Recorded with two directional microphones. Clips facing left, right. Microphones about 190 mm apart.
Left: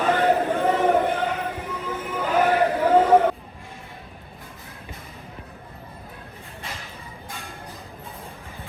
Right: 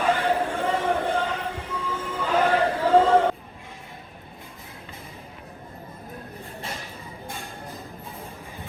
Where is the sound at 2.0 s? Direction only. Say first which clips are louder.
Left 2 dB; 10° left (ahead or behind).